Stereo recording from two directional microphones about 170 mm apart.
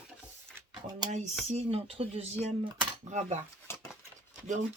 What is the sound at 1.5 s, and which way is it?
Speech, 35° right (ahead or behind).